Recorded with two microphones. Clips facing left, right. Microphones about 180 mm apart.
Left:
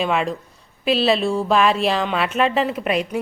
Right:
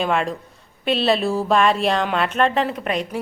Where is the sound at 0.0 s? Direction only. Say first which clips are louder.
Even; centre (ahead or behind).